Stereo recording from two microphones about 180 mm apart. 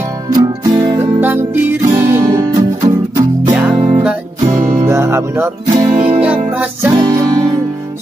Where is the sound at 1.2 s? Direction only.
10° right (ahead or behind).